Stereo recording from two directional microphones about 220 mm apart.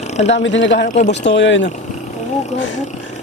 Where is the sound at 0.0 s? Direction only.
30° left (ahead or behind).